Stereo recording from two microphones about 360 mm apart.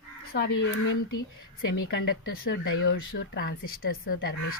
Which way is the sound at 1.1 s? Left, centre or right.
Left.